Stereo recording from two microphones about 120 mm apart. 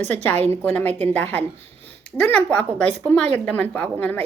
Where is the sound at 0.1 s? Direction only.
10° left (ahead or behind).